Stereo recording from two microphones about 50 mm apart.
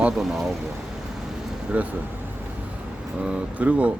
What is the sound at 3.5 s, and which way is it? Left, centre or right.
Speech, right.